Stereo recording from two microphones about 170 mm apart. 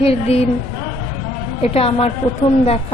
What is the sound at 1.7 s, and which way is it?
Speech, 35° left (ahead or behind).